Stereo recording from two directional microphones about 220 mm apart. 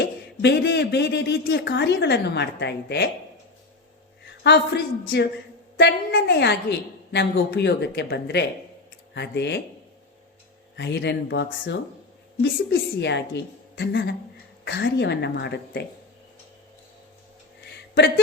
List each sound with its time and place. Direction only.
0.0 s speech: 50° left (ahead or behind)
4.4 s speech: 50° left (ahead or behind)
10.8 s speech: 50° left (ahead or behind)
13.0 s speech: 50° left (ahead or behind)